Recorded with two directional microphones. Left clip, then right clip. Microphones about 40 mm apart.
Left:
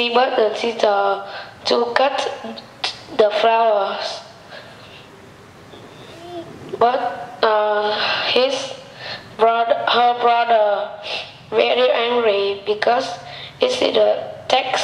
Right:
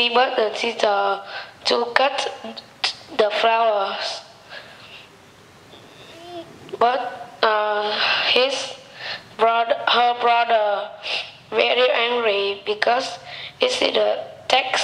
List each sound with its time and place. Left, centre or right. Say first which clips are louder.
0.0 s a man's voice: left 2 dB; right
6.3 s a sound: left 3 dB; right
7.3 s a woman's voice: left 2 dB; right